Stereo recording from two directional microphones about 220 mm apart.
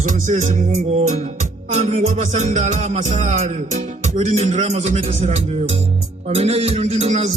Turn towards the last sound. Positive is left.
turn(degrees=-30)  # may be behind; listen again after turning